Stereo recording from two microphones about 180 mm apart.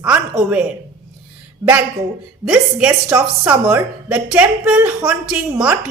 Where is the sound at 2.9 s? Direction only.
15° right (ahead or behind).